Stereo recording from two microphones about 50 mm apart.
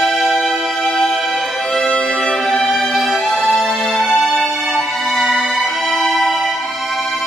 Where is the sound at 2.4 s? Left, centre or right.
Centre.